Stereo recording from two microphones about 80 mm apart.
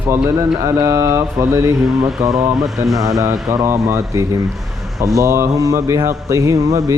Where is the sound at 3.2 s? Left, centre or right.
Right.